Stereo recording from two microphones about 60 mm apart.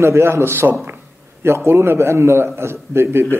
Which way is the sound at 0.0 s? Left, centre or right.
Right.